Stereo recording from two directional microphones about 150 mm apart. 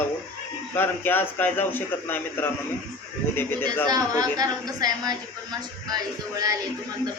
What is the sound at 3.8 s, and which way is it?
Child singing, 25° right (ahead or behind).